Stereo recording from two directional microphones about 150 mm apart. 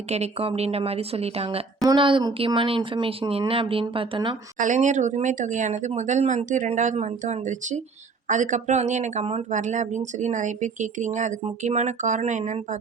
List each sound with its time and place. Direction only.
0.1 s speech: 40° right (ahead or behind)
1.8 s speech: 30° right (ahead or behind)
4.5 s speech: 55° right (ahead or behind)